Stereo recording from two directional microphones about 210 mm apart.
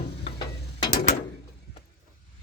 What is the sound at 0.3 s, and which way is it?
Mechanisms, 20° left (ahead or behind).